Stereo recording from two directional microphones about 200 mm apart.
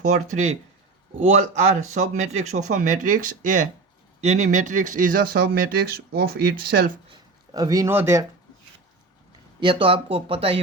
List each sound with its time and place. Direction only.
1.2 s speech: 35° right (ahead or behind)
7.1 s speech: 20° right (ahead or behind)
9.6 s speech: 25° right (ahead or behind)